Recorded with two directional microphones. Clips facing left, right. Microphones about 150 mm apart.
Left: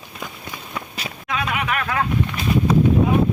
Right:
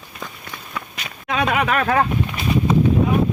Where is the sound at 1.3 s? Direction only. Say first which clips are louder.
Right 5 dB; 30° right (ahead or behind).